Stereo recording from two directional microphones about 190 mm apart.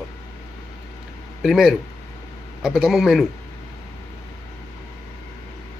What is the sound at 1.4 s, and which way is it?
Speech, centre (ahead or behind).